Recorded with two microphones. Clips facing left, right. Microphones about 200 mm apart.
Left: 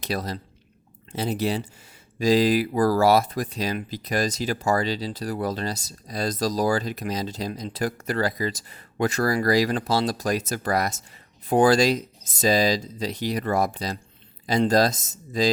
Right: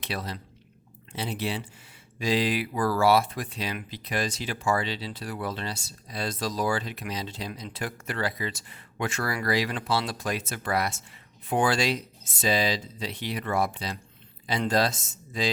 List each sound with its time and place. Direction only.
0.0 s speech: 40° left (ahead or behind)